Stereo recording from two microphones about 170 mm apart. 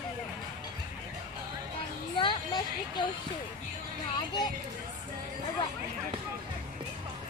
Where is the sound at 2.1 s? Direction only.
30° left (ahead or behind).